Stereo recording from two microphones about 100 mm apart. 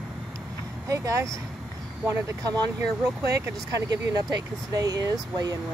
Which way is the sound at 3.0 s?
35° right (ahead or behind).